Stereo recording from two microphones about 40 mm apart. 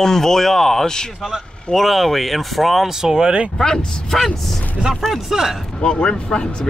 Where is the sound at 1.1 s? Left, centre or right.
Centre.